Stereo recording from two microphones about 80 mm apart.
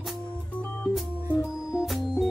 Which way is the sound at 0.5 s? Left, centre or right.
Centre.